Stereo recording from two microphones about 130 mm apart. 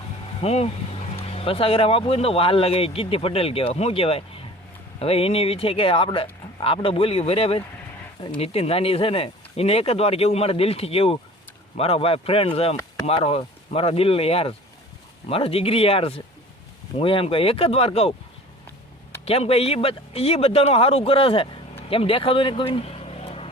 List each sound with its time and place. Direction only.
0.4 s speech: 55° left (ahead or behind)
19.2 s speech: 50° left (ahead or behind)